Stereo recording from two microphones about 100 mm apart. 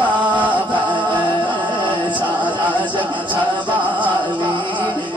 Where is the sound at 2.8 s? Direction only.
15° left (ahead or behind).